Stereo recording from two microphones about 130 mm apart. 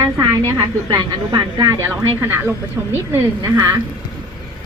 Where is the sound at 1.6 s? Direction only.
20° right (ahead or behind).